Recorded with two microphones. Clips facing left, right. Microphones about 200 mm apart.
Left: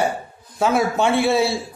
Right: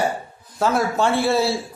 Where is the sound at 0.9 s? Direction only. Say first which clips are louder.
Left 1 dB; 20° left (ahead or behind).